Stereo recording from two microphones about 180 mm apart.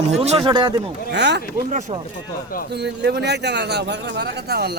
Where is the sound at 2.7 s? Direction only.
65° right (ahead or behind).